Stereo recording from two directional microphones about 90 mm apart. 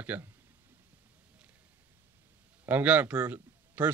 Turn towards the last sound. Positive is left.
turn(degrees=-20)  # may be behind; listen again after turning